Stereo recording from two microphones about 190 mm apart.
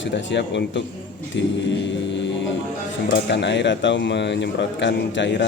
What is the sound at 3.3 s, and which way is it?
Speech, 65° left (ahead or behind).